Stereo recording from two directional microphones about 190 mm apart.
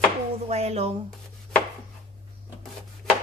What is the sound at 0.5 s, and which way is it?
Speech, 35° right (ahead or behind).